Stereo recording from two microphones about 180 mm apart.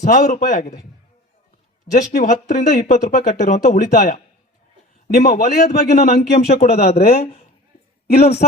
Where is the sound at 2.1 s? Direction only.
45° left (ahead or behind).